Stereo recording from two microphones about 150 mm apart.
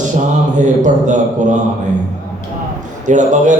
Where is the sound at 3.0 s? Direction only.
55° right (ahead or behind).